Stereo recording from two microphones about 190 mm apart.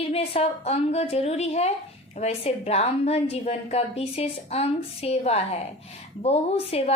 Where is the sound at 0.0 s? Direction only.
30° left (ahead or behind).